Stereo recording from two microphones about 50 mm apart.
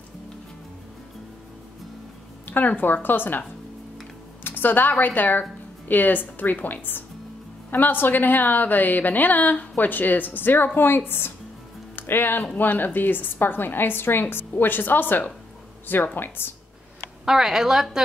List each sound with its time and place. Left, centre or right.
2.4 s a woman's voice: left
4.5 s a woman's voice: left
17.2 s a woman's voice: centre